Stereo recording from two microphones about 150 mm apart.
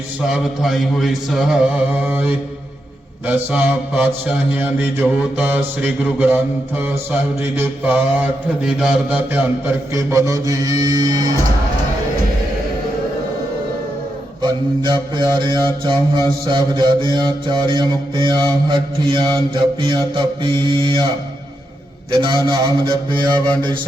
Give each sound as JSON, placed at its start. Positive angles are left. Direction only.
{"t": 0.3, "sound": "chant", "side_deg": 0}
{"t": 3.2, "sound": "mantra", "side_deg": -10}
{"t": 14.4, "sound": "mantra", "side_deg": -30}
{"t": 22.1, "sound": "mantra", "side_deg": -30}
{"t": 23.4, "sound": "mantra", "side_deg": -30}